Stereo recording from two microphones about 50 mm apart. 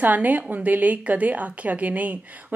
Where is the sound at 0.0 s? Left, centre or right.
Right.